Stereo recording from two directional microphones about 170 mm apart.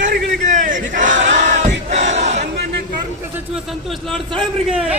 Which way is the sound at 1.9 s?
40° right (ahead or behind).